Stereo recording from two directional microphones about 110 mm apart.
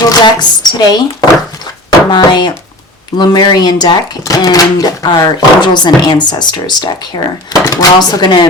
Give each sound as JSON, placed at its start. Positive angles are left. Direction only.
{"t": 0.0, "sound": "speech", "side_deg": 35}